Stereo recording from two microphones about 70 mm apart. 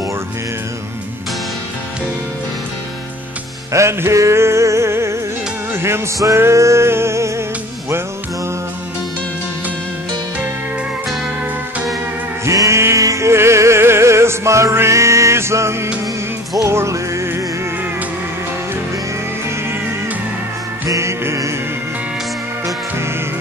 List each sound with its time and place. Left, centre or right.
3.7 s music: right
12.4 s music: right
20.8 s music: right